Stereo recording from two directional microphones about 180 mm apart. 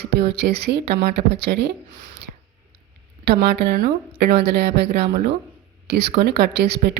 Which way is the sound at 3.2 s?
65° right (ahead or behind).